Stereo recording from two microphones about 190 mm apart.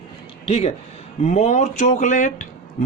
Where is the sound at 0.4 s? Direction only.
30° left (ahead or behind).